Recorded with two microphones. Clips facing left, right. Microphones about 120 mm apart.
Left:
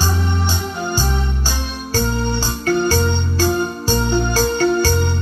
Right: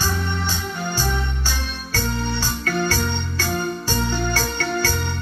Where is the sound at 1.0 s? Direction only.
30° left (ahead or behind).